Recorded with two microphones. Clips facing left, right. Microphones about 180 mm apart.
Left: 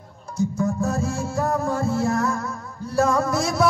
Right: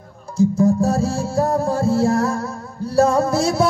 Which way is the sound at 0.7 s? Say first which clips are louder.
Right 5 dB; 30° right (ahead or behind).